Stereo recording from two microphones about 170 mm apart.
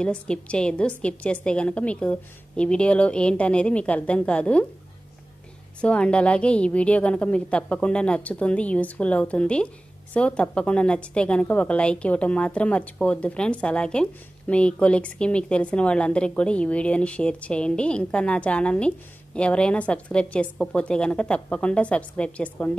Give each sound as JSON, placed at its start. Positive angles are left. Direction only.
{"t": 0.0, "sound": "a woman's voice", "side_deg": 5}
{"t": 5.8, "sound": "a woman's voice", "side_deg": 5}